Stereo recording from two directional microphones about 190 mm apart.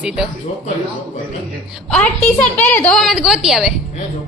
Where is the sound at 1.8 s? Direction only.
5° left (ahead or behind).